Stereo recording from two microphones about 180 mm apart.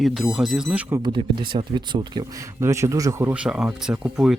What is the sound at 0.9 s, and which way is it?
Speech, 20° right (ahead or behind).